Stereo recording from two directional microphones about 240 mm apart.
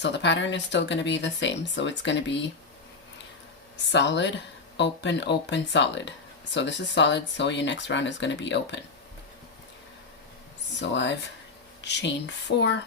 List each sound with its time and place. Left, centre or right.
0.0 s speech: left
3.9 s speech: left
10.8 s speech: left